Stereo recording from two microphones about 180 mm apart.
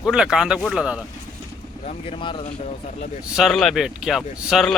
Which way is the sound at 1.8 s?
30° left (ahead or behind).